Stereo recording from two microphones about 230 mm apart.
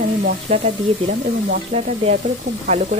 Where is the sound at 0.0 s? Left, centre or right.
Right.